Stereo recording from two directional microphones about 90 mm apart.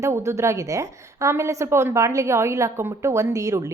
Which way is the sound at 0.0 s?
35° right (ahead or behind).